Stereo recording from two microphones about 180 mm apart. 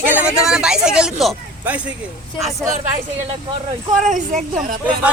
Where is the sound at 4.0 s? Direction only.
45° right (ahead or behind).